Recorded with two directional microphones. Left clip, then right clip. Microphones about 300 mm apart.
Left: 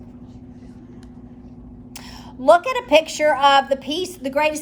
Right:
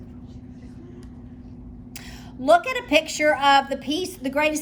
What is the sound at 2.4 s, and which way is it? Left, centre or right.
A woman's voice, centre.